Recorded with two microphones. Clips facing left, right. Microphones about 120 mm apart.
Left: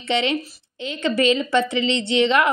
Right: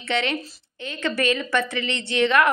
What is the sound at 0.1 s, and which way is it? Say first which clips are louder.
A woman's voice: left 3 dB; 15° left (ahead or behind).